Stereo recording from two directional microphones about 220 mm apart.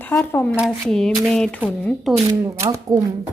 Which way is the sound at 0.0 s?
5° left (ahead or behind).